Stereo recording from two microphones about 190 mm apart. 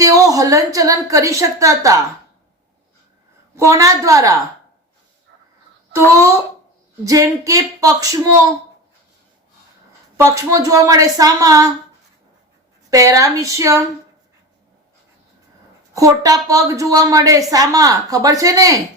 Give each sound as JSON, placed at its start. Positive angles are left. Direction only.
{"t": 0.0, "sound": "a woman's voice", "side_deg": -15}
{"t": 3.5, "sound": "a woman's voice", "side_deg": -15}
{"t": 5.9, "sound": "a woman's voice", "side_deg": -15}
{"t": 10.2, "sound": "a woman's voice", "side_deg": -15}
{"t": 12.9, "sound": "a woman's voice", "side_deg": -15}
{"t": 16.0, "sound": "a woman's voice", "side_deg": -15}